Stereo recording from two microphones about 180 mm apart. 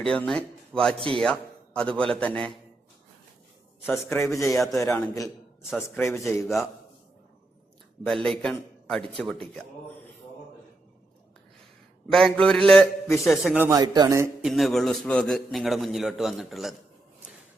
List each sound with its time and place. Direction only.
0.0 s a man's voice: 5° left (ahead or behind)
0.9 s speech: 30° right (ahead or behind)
1.2 s a man's voice: 5° left (ahead or behind)
3.8 s a man's voice: 15° left (ahead or behind)
8.0 s a man's voice: 5° left (ahead or behind)
12.1 s a man's voice: 5° left (ahead or behind)
13.7 s speech: 20° right (ahead or behind)
14.4 s a man's voice: centre (ahead or behind)